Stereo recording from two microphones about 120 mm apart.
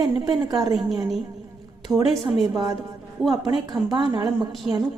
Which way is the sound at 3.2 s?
Centre (ahead or behind).